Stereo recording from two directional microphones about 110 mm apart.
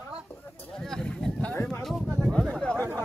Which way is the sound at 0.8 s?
5° left (ahead or behind).